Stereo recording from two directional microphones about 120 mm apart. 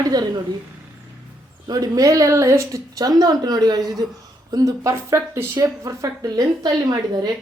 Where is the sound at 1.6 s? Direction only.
30° right (ahead or behind).